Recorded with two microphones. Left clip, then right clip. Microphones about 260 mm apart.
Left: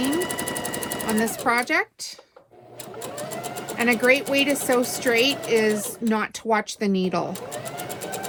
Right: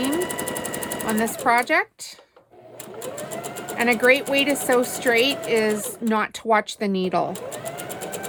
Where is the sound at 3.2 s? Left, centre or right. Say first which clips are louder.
Left 3 dB; centre.